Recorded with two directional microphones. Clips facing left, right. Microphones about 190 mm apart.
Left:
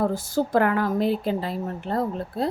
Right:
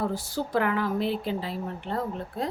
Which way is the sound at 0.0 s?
45° left (ahead or behind).